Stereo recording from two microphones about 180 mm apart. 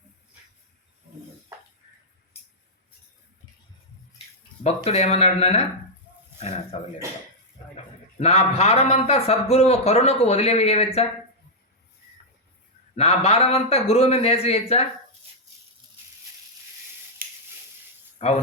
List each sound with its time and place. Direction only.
4.6 s a man's voice: 35° left (ahead or behind)
6.7 s a man's voice: 35° left (ahead or behind)
13.0 s a man's voice: 35° left (ahead or behind)
17.2 s a sound: 55° right (ahead or behind)
18.2 s a man's voice: 35° left (ahead or behind)